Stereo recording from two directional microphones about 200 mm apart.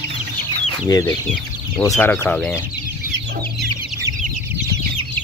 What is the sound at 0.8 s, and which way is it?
Speech, 15° left (ahead or behind).